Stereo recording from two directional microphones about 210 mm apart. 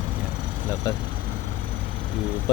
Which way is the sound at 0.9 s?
15° left (ahead or behind).